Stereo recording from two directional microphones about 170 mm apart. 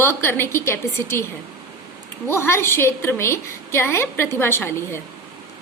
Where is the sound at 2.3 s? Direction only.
15° left (ahead or behind).